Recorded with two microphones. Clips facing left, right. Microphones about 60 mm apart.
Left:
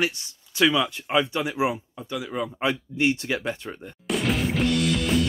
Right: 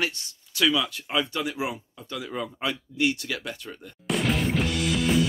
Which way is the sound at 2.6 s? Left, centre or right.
Left.